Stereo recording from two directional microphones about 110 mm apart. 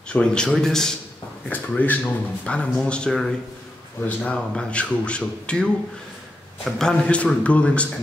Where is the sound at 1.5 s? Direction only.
15° left (ahead or behind).